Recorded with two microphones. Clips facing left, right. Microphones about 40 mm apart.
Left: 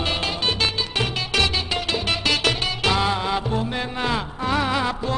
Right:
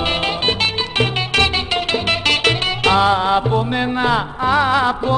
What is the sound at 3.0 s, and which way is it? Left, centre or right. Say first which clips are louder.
Music: right 8 dB; centre.